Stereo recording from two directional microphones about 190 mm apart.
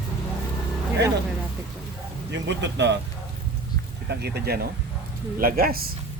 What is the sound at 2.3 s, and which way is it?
Speech, 70° right (ahead or behind).